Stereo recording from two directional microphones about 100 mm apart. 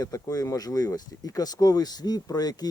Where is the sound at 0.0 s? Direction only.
35° left (ahead or behind).